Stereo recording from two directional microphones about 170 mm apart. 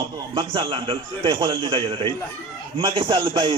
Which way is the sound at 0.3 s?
30° right (ahead or behind).